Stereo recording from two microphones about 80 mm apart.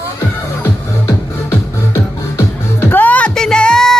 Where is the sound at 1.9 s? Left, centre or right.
Left.